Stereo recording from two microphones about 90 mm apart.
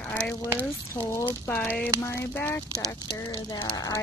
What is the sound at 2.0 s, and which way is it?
Speech, 30° left (ahead or behind).